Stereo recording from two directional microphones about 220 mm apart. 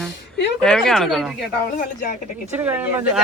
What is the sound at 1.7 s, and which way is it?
Speech, 35° left (ahead or behind).